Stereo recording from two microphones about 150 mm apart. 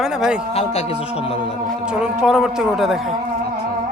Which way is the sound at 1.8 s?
5° right (ahead or behind).